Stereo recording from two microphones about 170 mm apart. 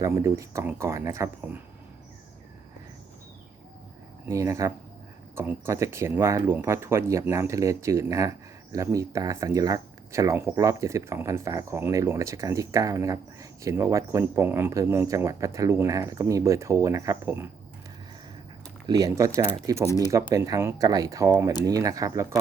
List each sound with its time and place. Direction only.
0.0 s speech: 15° right (ahead or behind)
4.3 s speech: 20° right (ahead or behind)
18.9 s speech: 20° right (ahead or behind)